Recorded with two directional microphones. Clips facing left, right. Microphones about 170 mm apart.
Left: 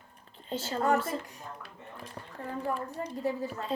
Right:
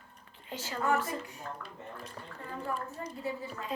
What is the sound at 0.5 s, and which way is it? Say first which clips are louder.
Speech: left 3 dB; 30° left (ahead or behind).